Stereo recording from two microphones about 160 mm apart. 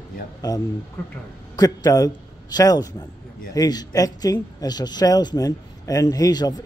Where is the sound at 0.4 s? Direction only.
25° left (ahead or behind).